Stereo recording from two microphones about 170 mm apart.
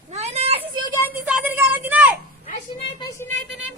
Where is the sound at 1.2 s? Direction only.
10° right (ahead or behind).